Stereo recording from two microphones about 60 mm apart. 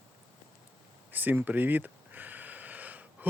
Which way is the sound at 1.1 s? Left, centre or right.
Right.